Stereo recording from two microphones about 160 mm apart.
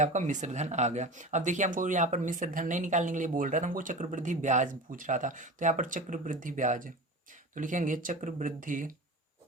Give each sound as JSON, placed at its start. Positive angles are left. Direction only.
{"t": 0.0, "sound": "speech", "side_deg": -50}